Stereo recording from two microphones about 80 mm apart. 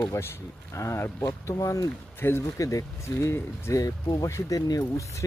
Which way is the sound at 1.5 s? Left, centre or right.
Left.